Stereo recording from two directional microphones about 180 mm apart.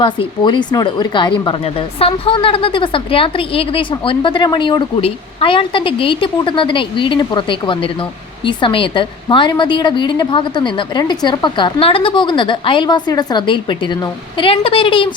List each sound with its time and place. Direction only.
0.0 s speech: 25° left (ahead or behind)